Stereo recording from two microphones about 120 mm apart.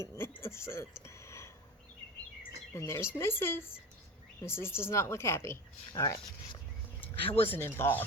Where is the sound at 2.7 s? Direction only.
25° left (ahead or behind).